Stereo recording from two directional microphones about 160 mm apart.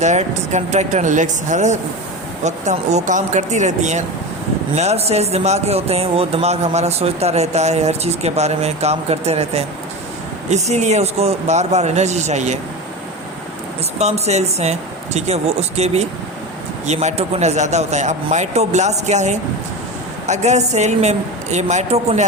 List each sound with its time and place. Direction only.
0.0 s speech: 45° right (ahead or behind)
14.0 s speech: 45° right (ahead or behind)